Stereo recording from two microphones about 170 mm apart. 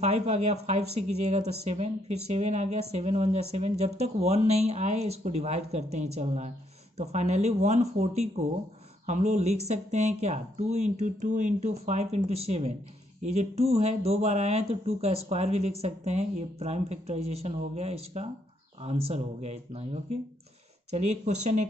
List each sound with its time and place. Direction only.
0.0 s speech: 40° right (ahead or behind)